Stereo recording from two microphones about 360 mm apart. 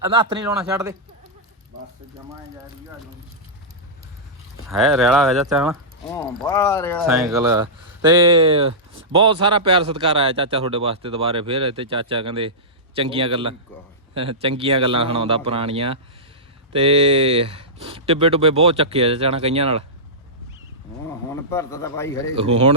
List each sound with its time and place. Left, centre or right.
0.1 s a man's voice: centre
4.7 s a man's voice: centre
21.5 s a man's voice: centre